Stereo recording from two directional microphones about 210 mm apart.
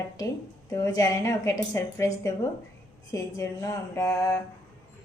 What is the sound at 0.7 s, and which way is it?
A woman's voice, 15° left (ahead or behind).